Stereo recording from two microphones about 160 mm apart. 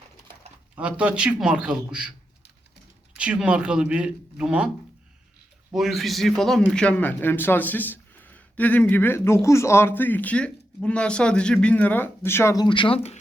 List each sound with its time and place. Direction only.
0.8 s a man's voice: 10° right (ahead or behind)
3.2 s speech: 5° right (ahead or behind)
5.7 s a man's voice: centre (ahead or behind); by 12.6 s 15° left (ahead or behind)
12.6 s speech: 30° left (ahead or behind)